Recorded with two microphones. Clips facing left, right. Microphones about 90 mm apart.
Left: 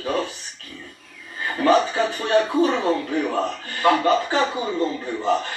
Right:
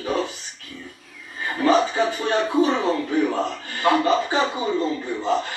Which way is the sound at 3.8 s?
15° right (ahead or behind).